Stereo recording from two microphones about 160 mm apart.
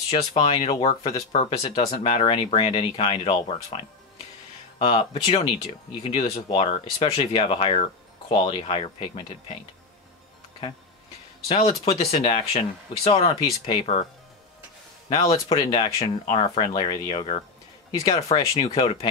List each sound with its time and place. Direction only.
0.3 s speech: 35° left (ahead or behind)
4.7 s speech: 30° left (ahead or behind)
11.4 s speech: 35° left (ahead or behind)
15.0 s speech: 20° left (ahead or behind)
18.7 s speech: 35° left (ahead or behind)